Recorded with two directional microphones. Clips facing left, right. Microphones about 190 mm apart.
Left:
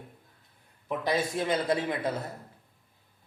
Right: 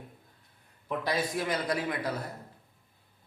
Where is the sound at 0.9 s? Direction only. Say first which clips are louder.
Left 2 dB; 25° left (ahead or behind).